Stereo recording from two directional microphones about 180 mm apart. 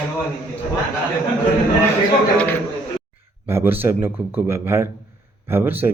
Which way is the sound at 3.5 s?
10° right (ahead or behind).